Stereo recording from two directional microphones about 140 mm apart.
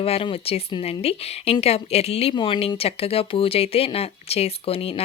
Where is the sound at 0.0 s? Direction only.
40° left (ahead or behind).